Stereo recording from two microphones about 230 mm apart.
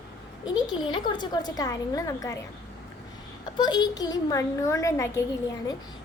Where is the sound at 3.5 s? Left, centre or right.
Centre.